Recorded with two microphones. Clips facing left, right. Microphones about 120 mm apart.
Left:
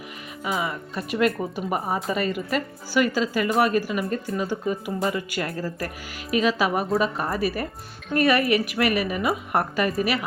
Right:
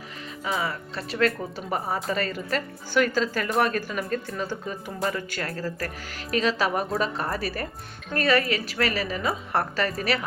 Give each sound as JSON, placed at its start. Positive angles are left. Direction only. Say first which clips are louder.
{"t": 0.6, "sound": "a woman's voice", "louder": "left 2 dB", "side_deg": 15}